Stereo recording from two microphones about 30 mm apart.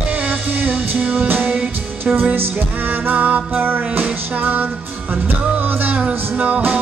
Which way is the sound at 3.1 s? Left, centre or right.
Right.